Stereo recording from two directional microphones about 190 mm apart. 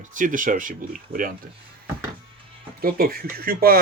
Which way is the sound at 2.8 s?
50° right (ahead or behind).